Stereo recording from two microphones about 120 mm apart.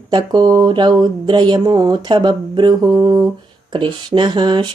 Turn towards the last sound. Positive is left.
turn(degrees=-40)  # may be behind; listen again after turning